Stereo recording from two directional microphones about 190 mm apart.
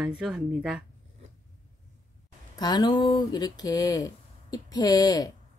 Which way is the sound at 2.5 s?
20° left (ahead or behind).